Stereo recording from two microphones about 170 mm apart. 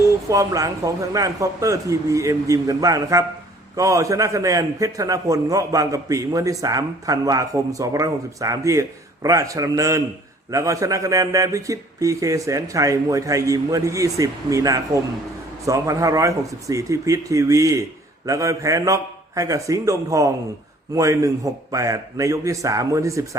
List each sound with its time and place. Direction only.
0.3 s a man's voice: 20° right (ahead or behind)